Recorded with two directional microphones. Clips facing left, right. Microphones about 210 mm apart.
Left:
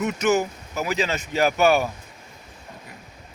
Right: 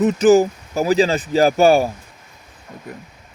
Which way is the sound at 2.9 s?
55° right (ahead or behind).